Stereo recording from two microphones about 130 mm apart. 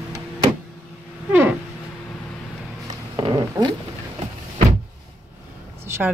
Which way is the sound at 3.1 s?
35° right (ahead or behind).